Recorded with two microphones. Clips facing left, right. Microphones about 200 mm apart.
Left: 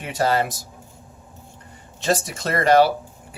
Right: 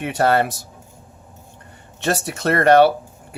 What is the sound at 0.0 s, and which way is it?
Speech, 60° right (ahead or behind).